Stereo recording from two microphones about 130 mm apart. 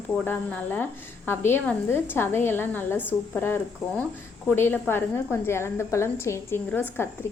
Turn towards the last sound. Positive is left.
turn(degrees=15)  # may be behind; listen again after turning